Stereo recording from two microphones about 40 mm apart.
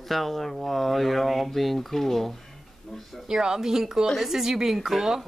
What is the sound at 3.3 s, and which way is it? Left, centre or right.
Speech, centre.